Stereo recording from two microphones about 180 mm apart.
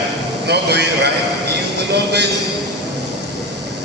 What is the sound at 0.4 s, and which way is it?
Speech, 65° right (ahead or behind).